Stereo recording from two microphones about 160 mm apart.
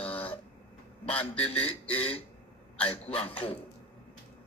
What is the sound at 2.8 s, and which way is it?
Speech, 35° left (ahead or behind).